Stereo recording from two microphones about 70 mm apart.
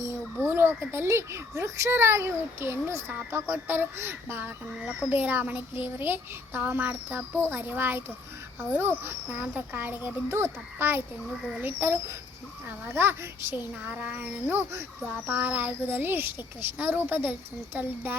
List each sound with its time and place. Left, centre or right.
0.3 s a child's voice: right
13.8 s a child's voice: right
14.5 s a child's voice: right
15.0 s a child's voice: right